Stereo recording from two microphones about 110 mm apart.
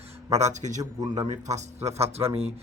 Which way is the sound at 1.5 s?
85° right.